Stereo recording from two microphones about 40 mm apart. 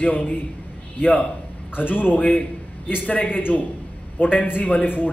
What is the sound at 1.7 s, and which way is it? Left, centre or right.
A man's voice, left.